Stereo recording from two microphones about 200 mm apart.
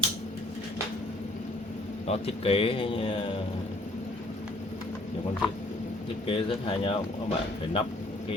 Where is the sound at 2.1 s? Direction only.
30° left (ahead or behind).